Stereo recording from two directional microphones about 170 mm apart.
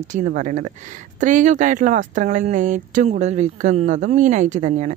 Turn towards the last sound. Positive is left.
turn(degrees=-45)  # may be behind; listen again after turning